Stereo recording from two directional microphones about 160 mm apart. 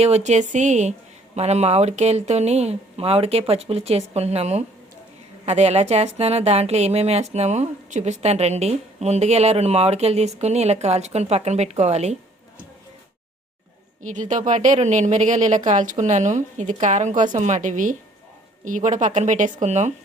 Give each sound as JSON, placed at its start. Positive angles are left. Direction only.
{"t": 0.0, "sound": "speech", "side_deg": -45}
{"t": 14.0, "sound": "speech", "side_deg": -50}